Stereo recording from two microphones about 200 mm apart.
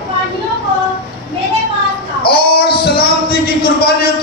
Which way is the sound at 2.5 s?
50° left (ahead or behind).